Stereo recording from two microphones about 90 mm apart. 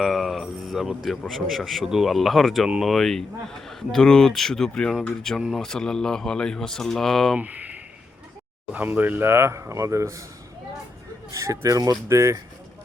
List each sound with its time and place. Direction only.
0.0 s a man's voice: centre (ahead or behind)
7.3 s speech: 15° right (ahead or behind); by 10.2 s 35° right (ahead or behind)
11.3 s speech: 35° right (ahead or behind)